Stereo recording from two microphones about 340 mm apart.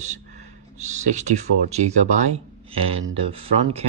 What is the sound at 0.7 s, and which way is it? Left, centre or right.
Speech, centre.